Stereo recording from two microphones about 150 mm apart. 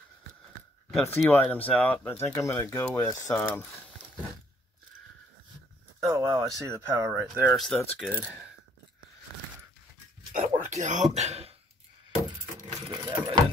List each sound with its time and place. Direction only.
0.9 s speech: 15° left (ahead or behind)
5.9 s speech: 20° right (ahead or behind)
7.5 s speech: centre (ahead or behind)
8.0 s speech: 10° right (ahead or behind)
10.3 s a sound: 50° right (ahead or behind)
12.9 s vehicle: 30° right (ahead or behind)